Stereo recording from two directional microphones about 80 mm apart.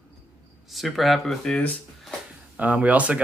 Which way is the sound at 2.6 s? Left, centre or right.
Centre.